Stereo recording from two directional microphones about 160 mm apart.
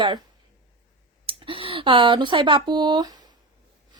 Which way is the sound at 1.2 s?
35° right (ahead or behind).